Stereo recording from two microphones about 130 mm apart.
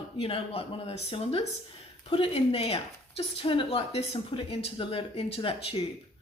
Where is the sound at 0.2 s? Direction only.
45° left (ahead or behind).